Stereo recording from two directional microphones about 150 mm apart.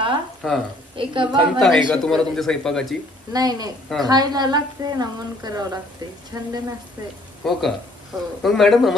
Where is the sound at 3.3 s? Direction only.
25° right (ahead or behind).